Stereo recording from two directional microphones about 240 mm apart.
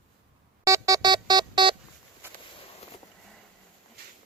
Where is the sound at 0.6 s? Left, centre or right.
Centre.